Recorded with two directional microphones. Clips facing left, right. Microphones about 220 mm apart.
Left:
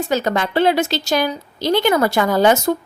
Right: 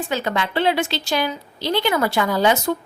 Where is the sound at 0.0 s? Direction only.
40° left (ahead or behind).